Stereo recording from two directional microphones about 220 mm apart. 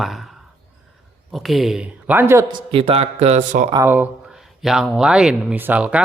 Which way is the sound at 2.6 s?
25° right (ahead or behind).